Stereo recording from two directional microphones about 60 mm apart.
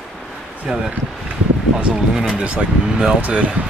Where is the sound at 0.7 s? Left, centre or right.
Centre.